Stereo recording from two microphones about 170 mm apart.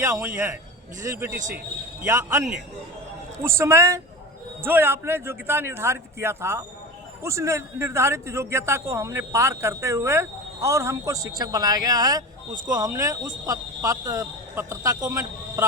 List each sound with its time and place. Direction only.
0.0 s a man's voice: 15° right (ahead or behind)